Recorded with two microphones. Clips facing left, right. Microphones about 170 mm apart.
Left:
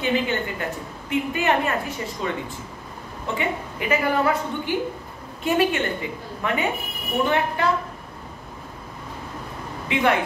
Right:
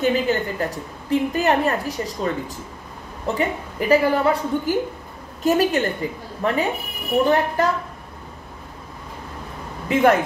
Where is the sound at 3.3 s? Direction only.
35° right (ahead or behind).